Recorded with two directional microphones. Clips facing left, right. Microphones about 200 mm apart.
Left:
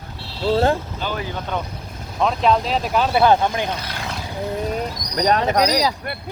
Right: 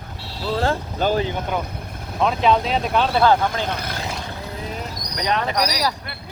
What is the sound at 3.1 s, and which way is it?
Speech, 20° left (ahead or behind).